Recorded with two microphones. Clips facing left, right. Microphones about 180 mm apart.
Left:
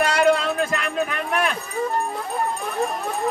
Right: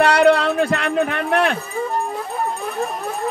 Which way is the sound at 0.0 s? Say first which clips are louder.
Right 5 dB; 65° right (ahead or behind).